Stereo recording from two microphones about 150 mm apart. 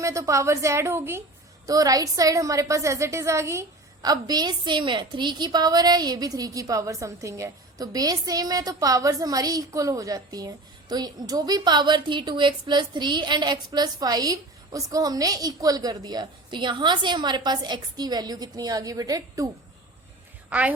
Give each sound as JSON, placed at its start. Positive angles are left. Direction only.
{"t": 0.0, "sound": "a woman's voice", "side_deg": -20}
{"t": 20.5, "sound": "a woman's voice", "side_deg": -10}